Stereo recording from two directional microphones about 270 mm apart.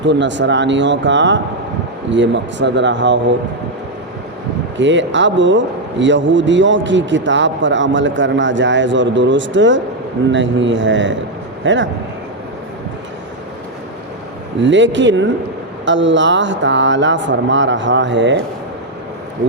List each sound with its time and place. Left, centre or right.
0.0 s speech: right
4.8 s a man's voice: right
14.6 s a man's voice: right